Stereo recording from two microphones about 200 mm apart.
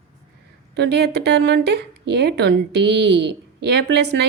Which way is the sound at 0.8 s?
55° right (ahead or behind).